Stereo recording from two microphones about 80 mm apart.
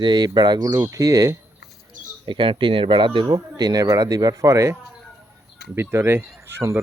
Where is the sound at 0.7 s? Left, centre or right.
Right.